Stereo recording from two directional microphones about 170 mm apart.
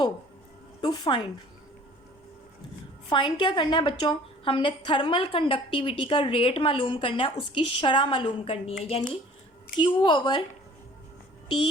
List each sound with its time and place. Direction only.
0.8 s a woman's voice: 25° left (ahead or behind)
3.1 s a woman's voice: 25° left (ahead or behind)
11.4 s speech: 25° left (ahead or behind)